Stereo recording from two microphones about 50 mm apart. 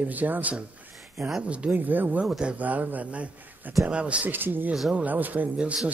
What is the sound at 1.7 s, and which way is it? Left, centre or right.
Speech, right.